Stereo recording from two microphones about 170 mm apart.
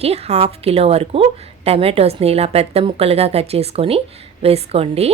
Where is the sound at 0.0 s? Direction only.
40° right (ahead or behind).